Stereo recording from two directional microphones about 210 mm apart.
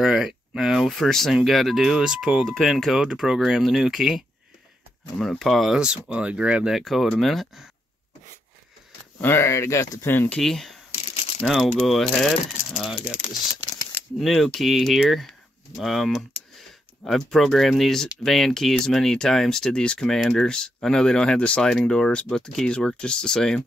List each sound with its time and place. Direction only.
0.0 s speech: centre (ahead or behind)
5.2 s speech: centre (ahead or behind)
9.2 s speech: 10° left (ahead or behind)
11.0 s crumpling: 30° left (ahead or behind)
11.4 s speech: centre (ahead or behind)
12.9 s speech: 30° left (ahead or behind)
14.2 s speech: centre (ahead or behind)